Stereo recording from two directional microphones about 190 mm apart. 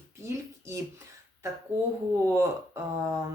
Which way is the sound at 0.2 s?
15° right (ahead or behind).